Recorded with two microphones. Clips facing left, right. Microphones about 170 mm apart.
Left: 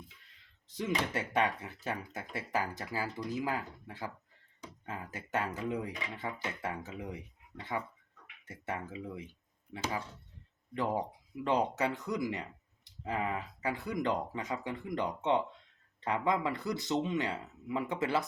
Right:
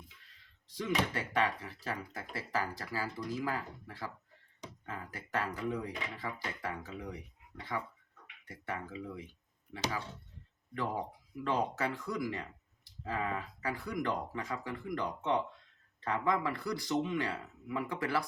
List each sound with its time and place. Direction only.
0.8 s speech: 20° left (ahead or behind)
11.4 s speech: 20° left (ahead or behind)